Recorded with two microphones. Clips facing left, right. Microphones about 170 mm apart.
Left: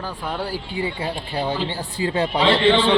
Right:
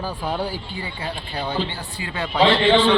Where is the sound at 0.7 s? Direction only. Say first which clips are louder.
Left 5 dB; 25° left (ahead or behind).